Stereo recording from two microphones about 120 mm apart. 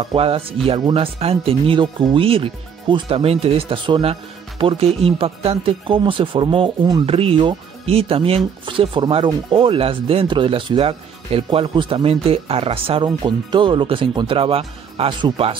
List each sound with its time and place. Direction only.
0.0 s speech: 50° right (ahead or behind)
8.6 s speech: 45° right (ahead or behind)